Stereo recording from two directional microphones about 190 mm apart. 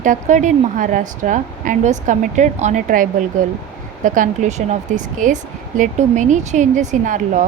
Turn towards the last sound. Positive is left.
turn(degrees=-40)  # may be behind; listen again after turning